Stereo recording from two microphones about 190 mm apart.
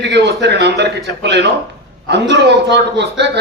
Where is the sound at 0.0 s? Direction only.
65° right (ahead or behind).